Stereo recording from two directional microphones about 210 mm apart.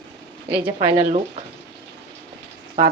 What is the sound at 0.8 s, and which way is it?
Speech, 25° right (ahead or behind).